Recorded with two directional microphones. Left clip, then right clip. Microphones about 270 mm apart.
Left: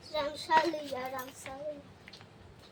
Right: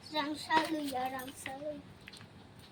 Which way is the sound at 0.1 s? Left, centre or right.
Left.